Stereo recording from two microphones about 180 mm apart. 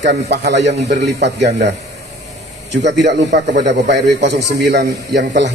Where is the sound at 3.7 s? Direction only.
75° right (ahead or behind).